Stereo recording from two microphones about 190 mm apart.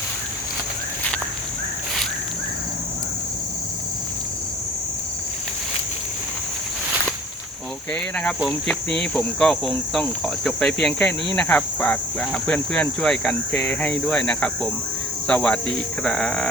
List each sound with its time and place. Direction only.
8.1 s speech: 5° left (ahead or behind)